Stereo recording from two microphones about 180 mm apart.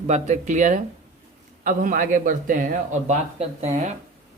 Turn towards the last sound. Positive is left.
turn(degrees=-40)  # may be behind; listen again after turning